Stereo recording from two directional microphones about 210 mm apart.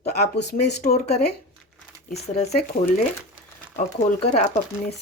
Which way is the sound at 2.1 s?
30° left (ahead or behind).